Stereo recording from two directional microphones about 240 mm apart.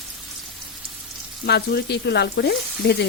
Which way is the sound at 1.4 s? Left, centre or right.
Left.